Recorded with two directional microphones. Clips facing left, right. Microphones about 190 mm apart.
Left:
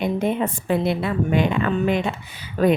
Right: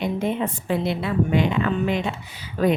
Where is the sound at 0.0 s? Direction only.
55° left (ahead or behind).